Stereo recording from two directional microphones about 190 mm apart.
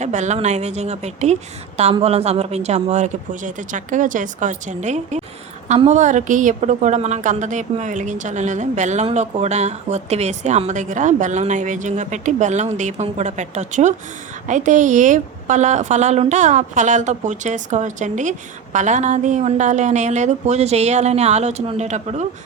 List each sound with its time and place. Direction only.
0.0 s a woman's voice: 40° right (ahead or behind)